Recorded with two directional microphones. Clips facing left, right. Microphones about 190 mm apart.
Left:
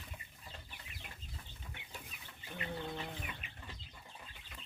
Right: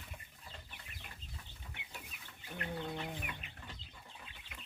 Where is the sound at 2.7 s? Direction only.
15° right (ahead or behind).